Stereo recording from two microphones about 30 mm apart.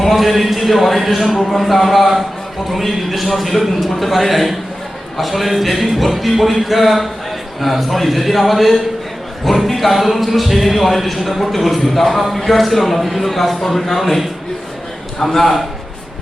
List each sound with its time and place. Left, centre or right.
0.0 s speech: centre
15.2 s a man's voice: centre